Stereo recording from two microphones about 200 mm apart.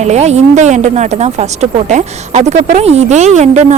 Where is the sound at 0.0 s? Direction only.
35° right (ahead or behind).